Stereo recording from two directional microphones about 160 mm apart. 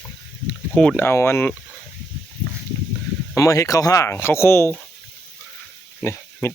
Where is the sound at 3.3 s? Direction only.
20° left (ahead or behind).